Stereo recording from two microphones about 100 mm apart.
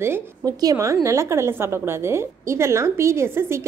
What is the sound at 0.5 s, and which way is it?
A woman's voice, 40° right (ahead or behind).